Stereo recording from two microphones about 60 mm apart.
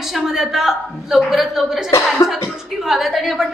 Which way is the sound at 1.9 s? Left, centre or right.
Left.